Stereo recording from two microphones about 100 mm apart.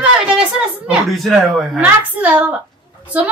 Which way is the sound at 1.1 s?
Centre (ahead or behind).